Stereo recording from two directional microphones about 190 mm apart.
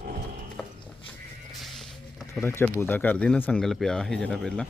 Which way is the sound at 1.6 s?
Centre (ahead or behind).